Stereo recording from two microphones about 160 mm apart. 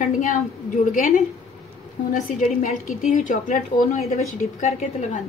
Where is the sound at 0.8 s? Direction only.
55° left (ahead or behind).